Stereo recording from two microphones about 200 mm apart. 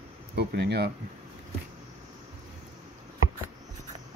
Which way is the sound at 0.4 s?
55° right (ahead or behind).